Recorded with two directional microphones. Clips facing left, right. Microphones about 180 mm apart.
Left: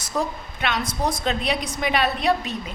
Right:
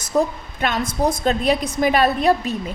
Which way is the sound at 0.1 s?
25° right (ahead or behind).